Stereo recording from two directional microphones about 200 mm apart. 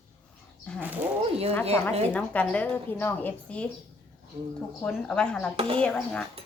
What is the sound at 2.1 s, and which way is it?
A woman's voice, 5° left (ahead or behind).